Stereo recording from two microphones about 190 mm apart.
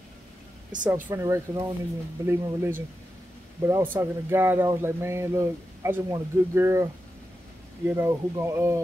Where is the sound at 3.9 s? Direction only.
15° right (ahead or behind).